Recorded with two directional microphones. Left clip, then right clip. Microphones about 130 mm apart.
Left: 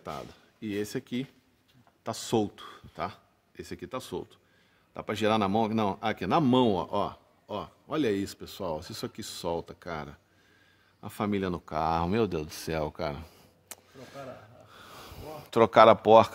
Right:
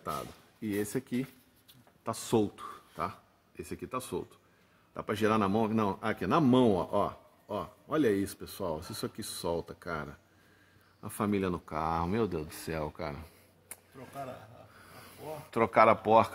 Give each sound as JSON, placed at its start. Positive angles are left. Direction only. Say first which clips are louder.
{"t": 0.1, "sound": "speech", "louder": "right 3 dB", "side_deg": 5}
{"t": 2.0, "sound": "speech", "louder": "left 1 dB", "side_deg": 20}
{"t": 4.9, "sound": "a man's voice", "louder": "left 2 dB", "side_deg": 30}
{"t": 15.5, "sound": "speech", "louder": "left 6 dB", "side_deg": 45}